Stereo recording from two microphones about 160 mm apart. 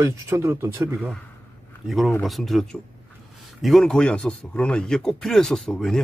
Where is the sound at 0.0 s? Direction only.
15° right (ahead or behind).